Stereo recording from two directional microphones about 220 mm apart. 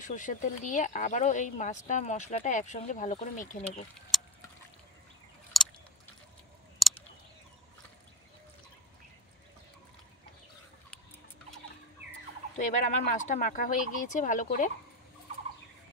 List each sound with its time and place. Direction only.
0.0 s speech: 35° left (ahead or behind)
4.1 s a sound: centre (ahead or behind)
5.5 s chewing: centre (ahead or behind)
6.8 s a sound: centre (ahead or behind)
12.0 s fowl: 50° right (ahead or behind)
12.5 s speech: 35° left (ahead or behind)